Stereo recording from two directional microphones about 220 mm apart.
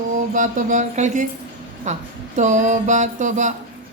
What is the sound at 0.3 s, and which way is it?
Speech, 35° right (ahead or behind).